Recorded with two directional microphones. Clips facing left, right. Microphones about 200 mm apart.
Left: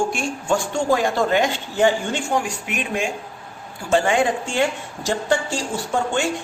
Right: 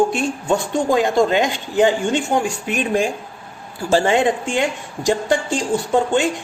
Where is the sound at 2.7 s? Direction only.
35° right (ahead or behind); by 5.6 s 15° right (ahead or behind).